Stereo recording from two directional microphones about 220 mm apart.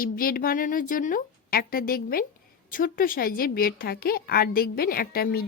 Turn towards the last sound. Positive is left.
turn(degrees=45)  # may be behind; listen again after turning